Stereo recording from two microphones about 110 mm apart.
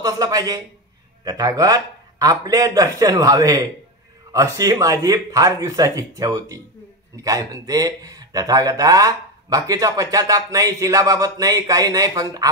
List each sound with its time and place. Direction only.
0.0 s speech: 35° right (ahead or behind)